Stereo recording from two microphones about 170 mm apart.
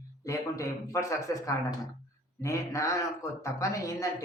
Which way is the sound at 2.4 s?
20° left (ahead or behind).